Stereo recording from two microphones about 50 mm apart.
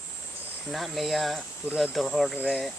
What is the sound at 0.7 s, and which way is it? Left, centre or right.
Speech, centre.